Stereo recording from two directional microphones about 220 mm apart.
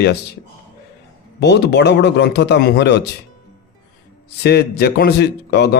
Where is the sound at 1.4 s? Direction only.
50° left (ahead or behind).